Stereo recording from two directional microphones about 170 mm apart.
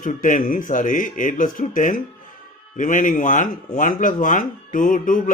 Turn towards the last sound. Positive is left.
turn(degrees=50)  # may be behind; listen again after turning